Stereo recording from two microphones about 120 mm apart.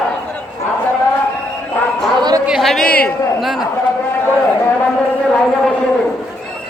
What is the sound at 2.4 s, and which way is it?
Speech, 5° right (ahead or behind).